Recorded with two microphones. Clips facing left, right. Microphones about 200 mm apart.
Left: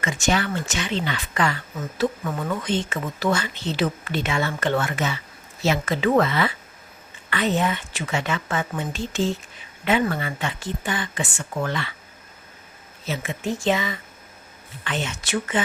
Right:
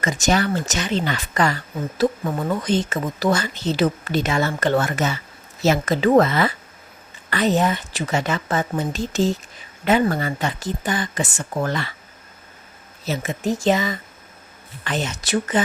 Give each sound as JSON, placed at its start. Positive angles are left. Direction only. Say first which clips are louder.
{"t": 0.0, "sound": "speech", "louder": "right 3 dB", "side_deg": -40}
{"t": 13.1, "sound": "speech", "louder": "right 4 dB", "side_deg": -40}